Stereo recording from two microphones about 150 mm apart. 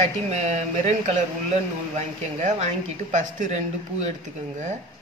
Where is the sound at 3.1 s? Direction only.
55° right (ahead or behind).